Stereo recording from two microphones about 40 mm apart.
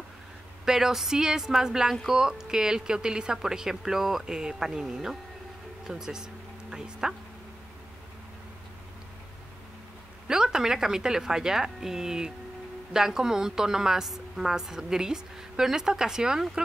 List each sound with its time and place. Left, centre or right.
0.7 s a woman's voice: centre
10.2 s a woman's voice: centre